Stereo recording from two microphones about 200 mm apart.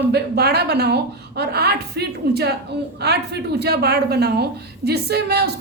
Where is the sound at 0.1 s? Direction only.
55° right (ahead or behind).